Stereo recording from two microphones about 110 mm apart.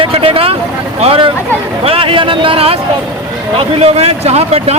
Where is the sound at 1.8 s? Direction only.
55° right (ahead or behind).